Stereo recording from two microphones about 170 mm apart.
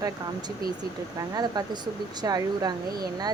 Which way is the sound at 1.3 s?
25° right (ahead or behind).